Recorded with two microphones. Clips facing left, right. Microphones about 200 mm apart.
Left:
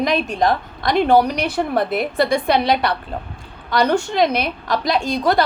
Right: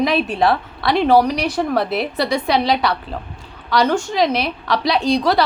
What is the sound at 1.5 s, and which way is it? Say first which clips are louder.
A woman's voice: even; 50° left (ahead or behind).